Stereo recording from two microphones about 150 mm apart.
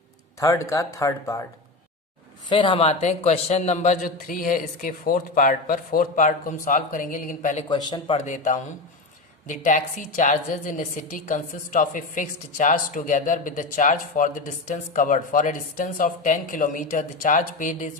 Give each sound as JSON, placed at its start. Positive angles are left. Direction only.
{"t": 0.3, "sound": "speech", "side_deg": 20}
{"t": 2.5, "sound": "a woman's voice", "side_deg": 35}
{"t": 7.7, "sound": "a man's voice", "side_deg": 30}
{"t": 8.2, "sound": "a woman's voice", "side_deg": 60}